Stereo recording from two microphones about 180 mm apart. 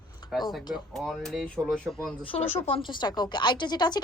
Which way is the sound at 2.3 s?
35° left (ahead or behind).